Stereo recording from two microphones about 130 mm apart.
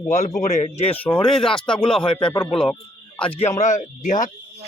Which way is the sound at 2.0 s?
40° left (ahead or behind).